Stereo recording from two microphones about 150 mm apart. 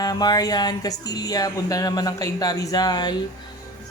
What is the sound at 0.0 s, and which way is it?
Speech, 25° left (ahead or behind).